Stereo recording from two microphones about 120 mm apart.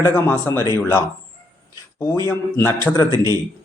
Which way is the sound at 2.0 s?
25° left (ahead or behind).